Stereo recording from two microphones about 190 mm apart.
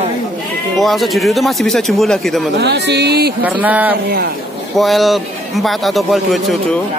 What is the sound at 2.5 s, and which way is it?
Speech, 60° right (ahead or behind).